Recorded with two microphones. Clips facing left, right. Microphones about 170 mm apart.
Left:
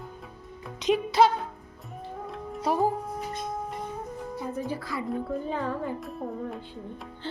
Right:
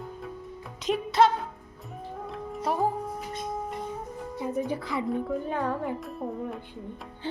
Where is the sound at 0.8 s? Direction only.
Centre (ahead or behind).